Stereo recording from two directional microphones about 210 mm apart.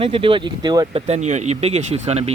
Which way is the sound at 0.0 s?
25° right (ahead or behind).